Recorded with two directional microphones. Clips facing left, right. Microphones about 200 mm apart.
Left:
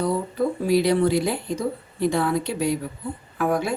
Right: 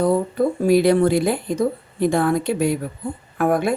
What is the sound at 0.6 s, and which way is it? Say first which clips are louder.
A woman's voice: right 4 dB; 50° right (ahead or behind).